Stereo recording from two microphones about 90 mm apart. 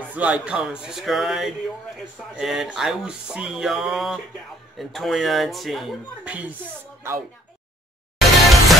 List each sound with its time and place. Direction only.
0.1 s speech: 15° right (ahead or behind)
6.2 s speech: 15° right (ahead or behind)
8.2 s music: centre (ahead or behind)